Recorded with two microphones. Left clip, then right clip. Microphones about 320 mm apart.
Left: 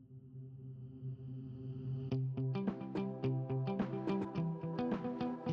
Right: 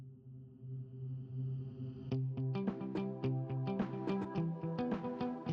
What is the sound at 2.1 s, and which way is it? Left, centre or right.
Music, centre.